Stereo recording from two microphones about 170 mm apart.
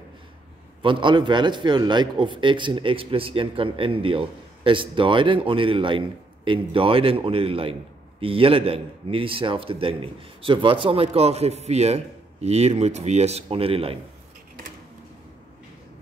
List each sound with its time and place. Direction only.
0.8 s a man's voice: 30° right (ahead or behind)